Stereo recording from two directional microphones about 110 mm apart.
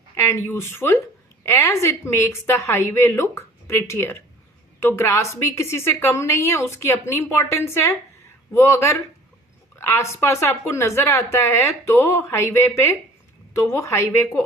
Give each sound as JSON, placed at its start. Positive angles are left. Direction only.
{"t": 0.2, "sound": "a woman's voice", "side_deg": 25}